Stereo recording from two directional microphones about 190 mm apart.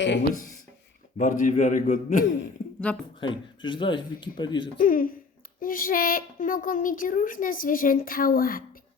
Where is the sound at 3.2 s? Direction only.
25° left (ahead or behind).